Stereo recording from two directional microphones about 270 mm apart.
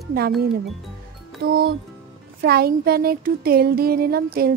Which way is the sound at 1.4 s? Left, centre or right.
Right.